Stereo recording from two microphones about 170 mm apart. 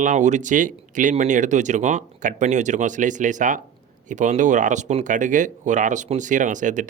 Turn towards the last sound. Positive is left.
turn(degrees=-50)  # may be behind; listen again after turning